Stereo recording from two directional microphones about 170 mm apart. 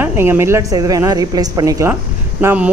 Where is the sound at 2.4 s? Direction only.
10° right (ahead or behind).